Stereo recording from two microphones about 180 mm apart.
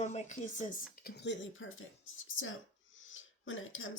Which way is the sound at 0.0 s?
40° left (ahead or behind).